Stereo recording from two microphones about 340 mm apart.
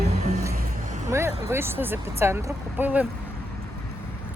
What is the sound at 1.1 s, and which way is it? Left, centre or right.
Vehicle, centre.